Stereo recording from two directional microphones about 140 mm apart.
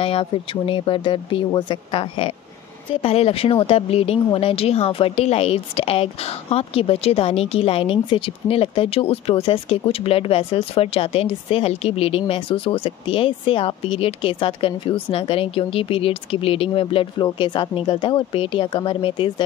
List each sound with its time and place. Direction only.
0.0 s speech: 40° left (ahead or behind)